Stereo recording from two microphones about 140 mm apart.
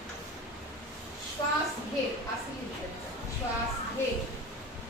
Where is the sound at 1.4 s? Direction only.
30° left (ahead or behind).